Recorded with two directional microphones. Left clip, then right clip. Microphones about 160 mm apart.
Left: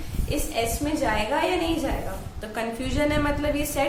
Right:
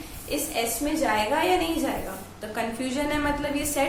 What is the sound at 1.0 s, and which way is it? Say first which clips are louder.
A woman's voice: right 1 dB; 5° left (ahead or behind).